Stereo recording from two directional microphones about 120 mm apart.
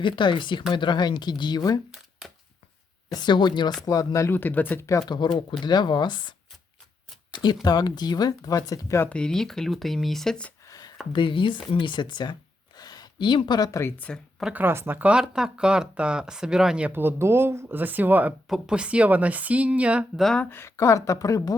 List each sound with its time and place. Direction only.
0.0 s speech: 40° left (ahead or behind)
3.1 s speech: 40° left (ahead or behind)
3.8 s speech: 30° left (ahead or behind)
4.9 s speech: 30° left (ahead or behind)
7.3 s speech: 35° left (ahead or behind)
9.0 s speech: 10° left (ahead or behind)
10.7 s a sound: 35° left (ahead or behind)
11.1 s speech: 45° left (ahead or behind); by 13.9 s 25° left (ahead or behind)
14.0 s speech: 5° left (ahead or behind)
14.4 s speech: 15° right (ahead or behind)
18.4 s speech: 5° right (ahead or behind)
20.2 s speech: 5° left (ahead or behind)
20.5 s a woman's voice: 20° left (ahead or behind)